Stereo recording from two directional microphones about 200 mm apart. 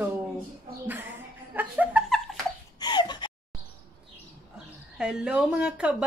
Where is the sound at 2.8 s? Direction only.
20° left (ahead or behind).